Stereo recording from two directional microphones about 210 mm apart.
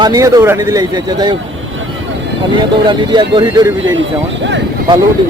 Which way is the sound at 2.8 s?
25° right (ahead or behind).